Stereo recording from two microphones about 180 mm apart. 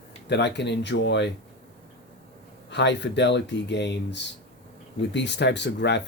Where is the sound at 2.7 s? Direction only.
75° left (ahead or behind).